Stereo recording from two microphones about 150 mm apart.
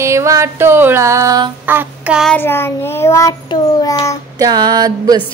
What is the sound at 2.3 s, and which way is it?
Child singing, 15° left (ahead or behind).